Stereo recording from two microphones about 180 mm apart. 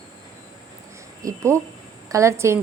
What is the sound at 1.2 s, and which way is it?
A woman's voice, 15° right (ahead or behind).